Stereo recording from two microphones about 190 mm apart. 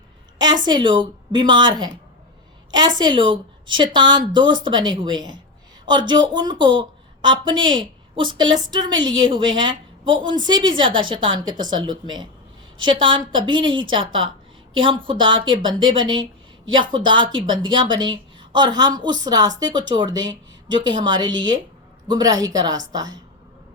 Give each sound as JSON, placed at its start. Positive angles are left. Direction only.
{"t": 0.3, "sound": "a woman's voice", "side_deg": -20}